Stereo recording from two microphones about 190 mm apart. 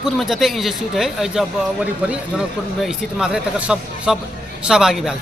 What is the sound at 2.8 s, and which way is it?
Speech, 5° right (ahead or behind).